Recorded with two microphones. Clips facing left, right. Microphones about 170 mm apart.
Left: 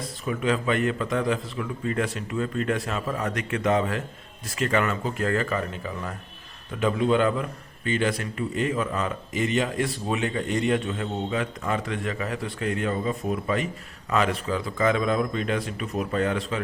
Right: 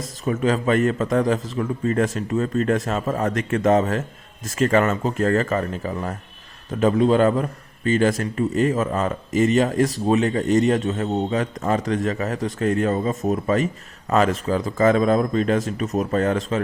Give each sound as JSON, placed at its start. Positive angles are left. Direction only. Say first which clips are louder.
{"t": 0.3, "sound": "a man's voice", "louder": "right 5 dB", "side_deg": -40}